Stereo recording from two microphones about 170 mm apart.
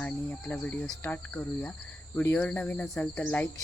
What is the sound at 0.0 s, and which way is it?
Speech, 10° left (ahead or behind).